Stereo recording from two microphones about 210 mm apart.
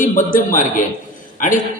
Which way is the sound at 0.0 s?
40° left (ahead or behind).